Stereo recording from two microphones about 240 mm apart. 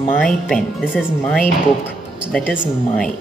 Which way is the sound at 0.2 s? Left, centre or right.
Centre.